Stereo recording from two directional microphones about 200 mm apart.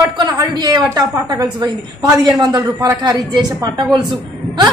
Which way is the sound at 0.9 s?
20° right (ahead or behind).